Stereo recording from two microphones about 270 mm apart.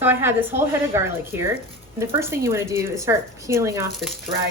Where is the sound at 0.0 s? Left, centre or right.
Centre.